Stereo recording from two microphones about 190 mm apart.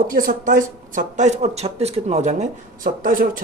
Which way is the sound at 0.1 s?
45° right (ahead or behind).